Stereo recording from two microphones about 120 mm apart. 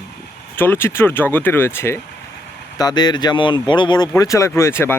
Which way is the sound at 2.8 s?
35° left (ahead or behind).